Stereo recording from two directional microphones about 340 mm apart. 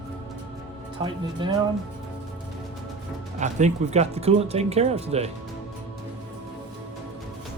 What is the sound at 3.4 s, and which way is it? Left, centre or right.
Speech, right.